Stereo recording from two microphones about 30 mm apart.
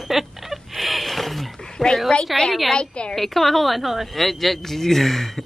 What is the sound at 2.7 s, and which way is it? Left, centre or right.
Speech, left.